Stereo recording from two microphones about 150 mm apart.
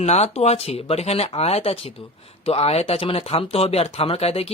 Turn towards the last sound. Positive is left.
turn(degrees=40)  # may be behind; listen again after turning